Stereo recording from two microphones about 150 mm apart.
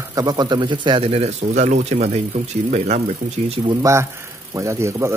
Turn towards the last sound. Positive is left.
turn(degrees=-20)  # may be behind; listen again after turning